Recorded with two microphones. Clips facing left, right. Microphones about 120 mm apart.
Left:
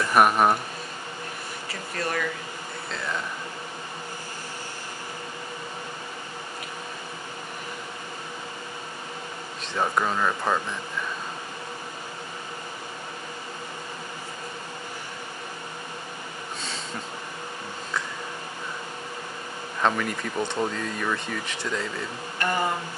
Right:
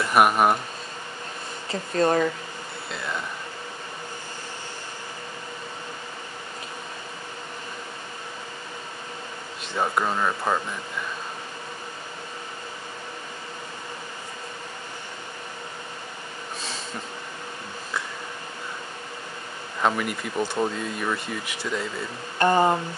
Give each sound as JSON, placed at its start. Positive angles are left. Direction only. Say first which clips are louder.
{"t": 0.0, "sound": "speech", "louder": "even", "side_deg": -5}
{"t": 1.7, "sound": "speech", "louder": "right 9 dB", "side_deg": -25}
{"t": 9.8, "sound": "speech", "louder": "even", "side_deg": -5}
{"t": 19.8, "sound": "speech", "louder": "even", "side_deg": -10}
{"t": 22.4, "sound": "speech", "louder": "right 7 dB", "side_deg": -30}